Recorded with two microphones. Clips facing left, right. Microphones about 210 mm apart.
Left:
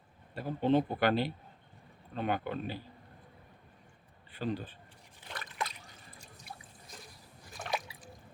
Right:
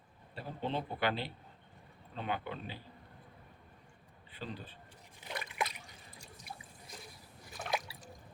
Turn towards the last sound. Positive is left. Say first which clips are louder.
# even
turn(degrees=-5)  # may be behind; listen again after turning